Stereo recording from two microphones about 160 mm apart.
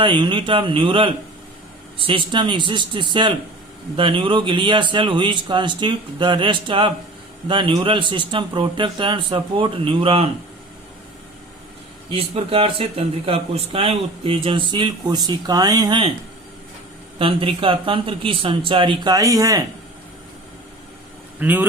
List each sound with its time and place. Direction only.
0.0 s a man's voice: 30° right (ahead or behind)
12.1 s speech: 35° right (ahead or behind)
17.2 s speech: 35° right (ahead or behind)
21.3 s speech: 10° right (ahead or behind)